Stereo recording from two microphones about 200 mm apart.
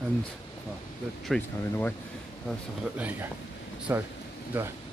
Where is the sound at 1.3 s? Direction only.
10° left (ahead or behind).